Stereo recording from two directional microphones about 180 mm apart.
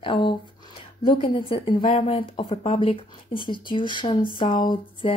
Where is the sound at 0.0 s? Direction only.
30° left (ahead or behind).